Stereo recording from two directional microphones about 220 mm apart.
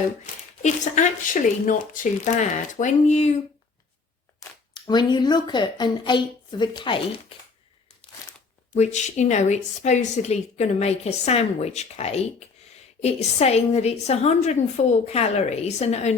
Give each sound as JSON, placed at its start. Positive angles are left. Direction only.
{"t": 0.6, "sound": "a woman's voice", "side_deg": 35}
{"t": 4.4, "sound": "speech", "side_deg": 20}
{"t": 8.7, "sound": "a woman's voice", "side_deg": 30}